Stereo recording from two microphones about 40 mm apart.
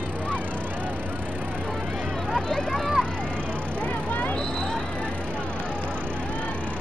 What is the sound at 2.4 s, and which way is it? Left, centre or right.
Vehicle, centre.